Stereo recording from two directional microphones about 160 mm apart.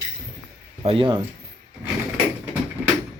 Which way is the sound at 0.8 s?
35° right (ahead or behind).